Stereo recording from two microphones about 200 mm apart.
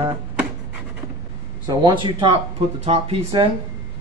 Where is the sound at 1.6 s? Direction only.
20° right (ahead or behind).